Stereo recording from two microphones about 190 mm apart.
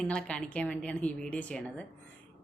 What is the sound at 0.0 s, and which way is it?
A woman's voice, 5° left (ahead or behind).